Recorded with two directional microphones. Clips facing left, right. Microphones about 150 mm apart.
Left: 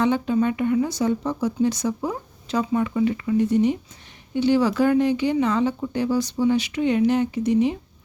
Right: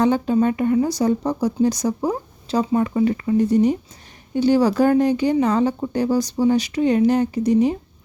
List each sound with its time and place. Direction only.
0.0 s speech: 40° right (ahead or behind)